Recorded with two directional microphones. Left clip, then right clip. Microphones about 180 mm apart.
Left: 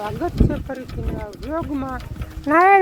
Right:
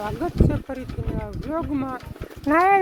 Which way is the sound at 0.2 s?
5° right (ahead or behind).